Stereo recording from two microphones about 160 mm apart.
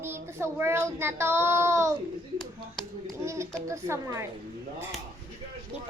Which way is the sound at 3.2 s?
15° right (ahead or behind).